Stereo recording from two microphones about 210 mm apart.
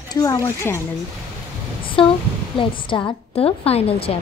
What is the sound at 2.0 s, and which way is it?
A woman's voice, 25° left (ahead or behind).